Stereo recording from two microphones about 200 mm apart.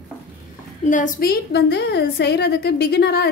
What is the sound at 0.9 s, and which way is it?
A woman's voice, 40° left (ahead or behind).